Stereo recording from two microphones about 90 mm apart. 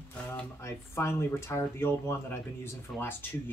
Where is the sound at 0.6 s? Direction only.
30° left (ahead or behind).